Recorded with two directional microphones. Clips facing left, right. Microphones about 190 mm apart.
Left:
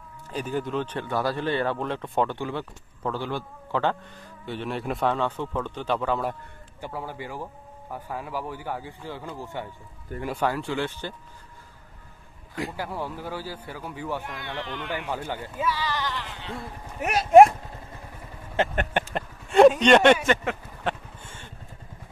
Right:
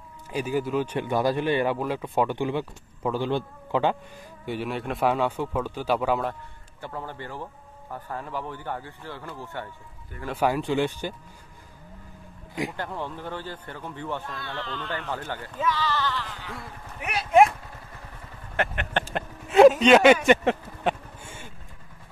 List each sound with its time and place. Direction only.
0.3 s speech: 10° right (ahead or behind)
4.5 s speech: 5° right (ahead or behind)
6.8 s speech: 10° left (ahead or behind)
10.3 s speech: 15° right (ahead or behind)
12.7 s speech: 10° left (ahead or behind); by 16.6 s 25° left (ahead or behind)
17.0 s speech: 45° left (ahead or behind)
19.1 s speech: centre (ahead or behind)
20.8 s vehicle: 10° right (ahead or behind)